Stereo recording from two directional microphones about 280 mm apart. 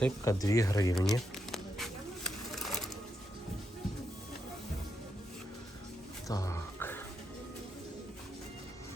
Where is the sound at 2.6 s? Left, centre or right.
Left.